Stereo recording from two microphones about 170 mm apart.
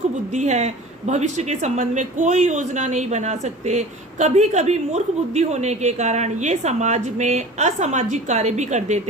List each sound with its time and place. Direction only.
0.3 s speech: 40° right (ahead or behind)